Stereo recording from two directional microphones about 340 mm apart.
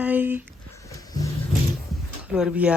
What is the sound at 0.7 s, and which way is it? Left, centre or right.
Music, centre.